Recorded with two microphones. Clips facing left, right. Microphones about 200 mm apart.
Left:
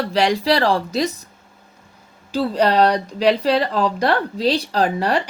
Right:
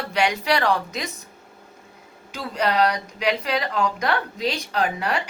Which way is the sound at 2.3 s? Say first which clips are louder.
Left 7 dB; 35° left (ahead or behind).